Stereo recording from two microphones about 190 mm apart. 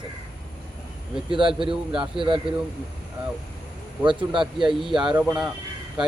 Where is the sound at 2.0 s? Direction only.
25° right (ahead or behind).